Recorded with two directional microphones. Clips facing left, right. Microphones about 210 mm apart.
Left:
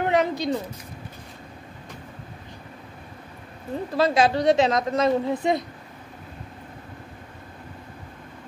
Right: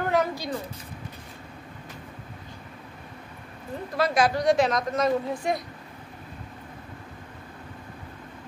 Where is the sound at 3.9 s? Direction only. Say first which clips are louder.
Left 3 dB; 25° left (ahead or behind).